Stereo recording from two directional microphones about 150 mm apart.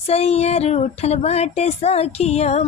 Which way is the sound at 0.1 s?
45° left (ahead or behind).